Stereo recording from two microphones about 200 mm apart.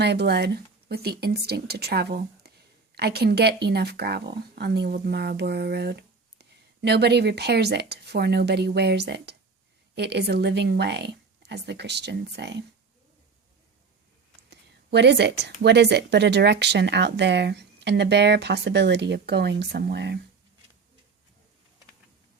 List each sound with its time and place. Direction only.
0.0 s speech: 55° right (ahead or behind)
14.5 s speech: 55° right (ahead or behind)